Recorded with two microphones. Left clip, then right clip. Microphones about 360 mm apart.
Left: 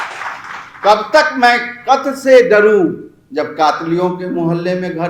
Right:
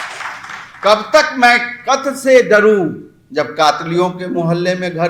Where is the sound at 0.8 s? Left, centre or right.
Right.